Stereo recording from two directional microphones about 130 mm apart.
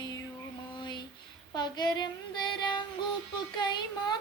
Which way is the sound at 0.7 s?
35° left (ahead or behind).